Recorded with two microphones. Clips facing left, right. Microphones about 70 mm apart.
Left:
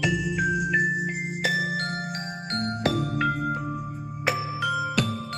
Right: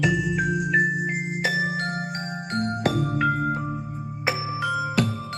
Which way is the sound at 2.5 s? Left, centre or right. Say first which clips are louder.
Right 3 dB; centre.